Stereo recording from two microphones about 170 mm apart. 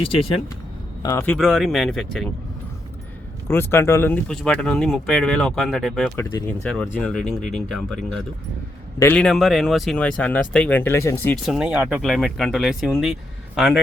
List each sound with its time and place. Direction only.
0.0 s speech: 35° left (ahead or behind)
1.0 s speech: 15° left (ahead or behind)
1.4 s speech: centre (ahead or behind)
3.5 s speech: 15° left (ahead or behind)
11.4 s speech: 5° right (ahead or behind)